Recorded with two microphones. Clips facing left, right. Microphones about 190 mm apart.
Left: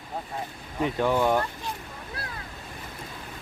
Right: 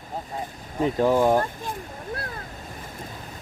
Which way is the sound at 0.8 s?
35° right (ahead or behind).